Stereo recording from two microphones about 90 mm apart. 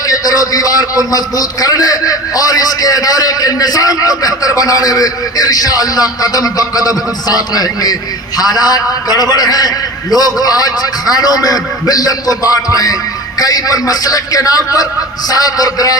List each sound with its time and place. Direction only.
0.1 s a man's voice: 40° left (ahead or behind)